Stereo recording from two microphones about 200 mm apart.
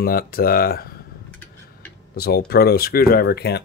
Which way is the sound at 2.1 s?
50° left (ahead or behind).